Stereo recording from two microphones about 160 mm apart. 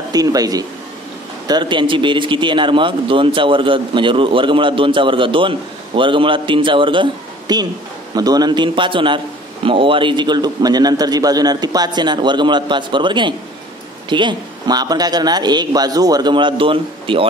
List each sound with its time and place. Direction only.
0.1 s a man's voice: 25° right (ahead or behind)